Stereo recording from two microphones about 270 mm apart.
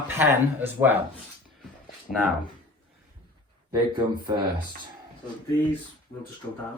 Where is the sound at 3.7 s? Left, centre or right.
Centre.